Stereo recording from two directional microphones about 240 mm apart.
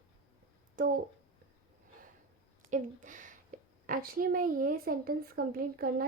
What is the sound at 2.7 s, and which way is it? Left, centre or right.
A woman's voice, right.